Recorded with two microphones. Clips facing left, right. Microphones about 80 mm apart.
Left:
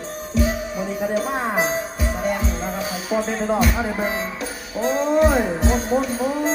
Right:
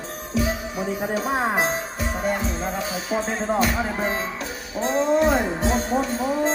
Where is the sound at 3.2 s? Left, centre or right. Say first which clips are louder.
Left 2 dB; right.